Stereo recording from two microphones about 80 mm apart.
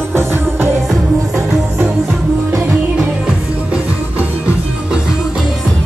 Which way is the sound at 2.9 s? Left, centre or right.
Centre.